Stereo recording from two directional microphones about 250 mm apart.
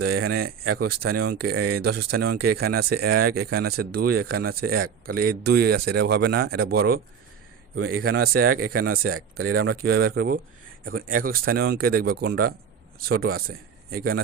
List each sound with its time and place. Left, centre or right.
0.0 s speech: right
7.8 s speech: right
8.0 s speech: right
8.6 s speech: right
8.9 s speech: right